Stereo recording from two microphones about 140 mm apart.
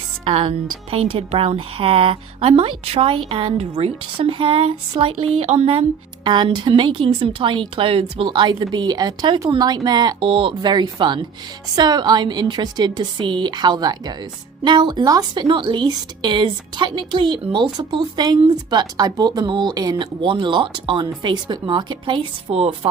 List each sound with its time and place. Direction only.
0.3 s a woman's voice: 40° right (ahead or behind)
6.2 s speech: 30° right (ahead or behind)